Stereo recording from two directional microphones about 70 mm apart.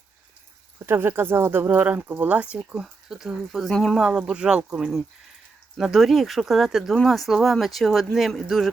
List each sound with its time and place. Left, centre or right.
0.9 s speech: right
1.6 s speech: right
2.8 s speech: centre
4.0 s speech: centre